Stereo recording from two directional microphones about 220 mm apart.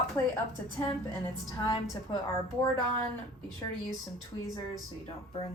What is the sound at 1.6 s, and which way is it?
Speech, 20° left (ahead or behind).